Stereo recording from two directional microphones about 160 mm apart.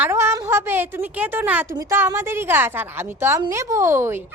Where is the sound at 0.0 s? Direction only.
15° right (ahead or behind).